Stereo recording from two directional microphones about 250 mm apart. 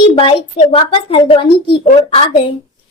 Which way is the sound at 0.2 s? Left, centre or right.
Left.